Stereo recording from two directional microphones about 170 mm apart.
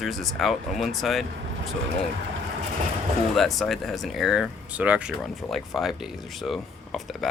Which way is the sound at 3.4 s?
Centre (ahead or behind).